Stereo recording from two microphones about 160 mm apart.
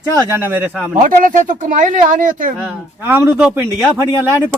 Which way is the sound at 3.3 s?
10° right (ahead or behind).